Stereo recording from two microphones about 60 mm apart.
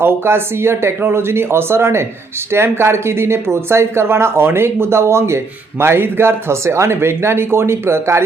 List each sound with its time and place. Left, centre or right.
0.0 s speech: right